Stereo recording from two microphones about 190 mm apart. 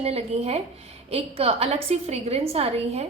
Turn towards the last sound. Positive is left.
turn(degrees=-35)  # may be behind; listen again after turning